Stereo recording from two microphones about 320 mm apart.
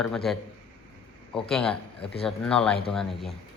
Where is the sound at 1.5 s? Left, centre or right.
Centre.